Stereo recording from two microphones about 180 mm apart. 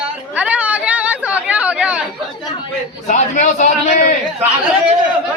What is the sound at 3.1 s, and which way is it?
A man's voice, 40° left (ahead or behind).